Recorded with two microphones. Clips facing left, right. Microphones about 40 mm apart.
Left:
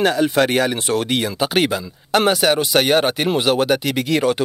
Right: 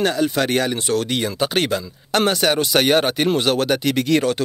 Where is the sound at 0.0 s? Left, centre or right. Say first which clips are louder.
Left 3 dB; centre.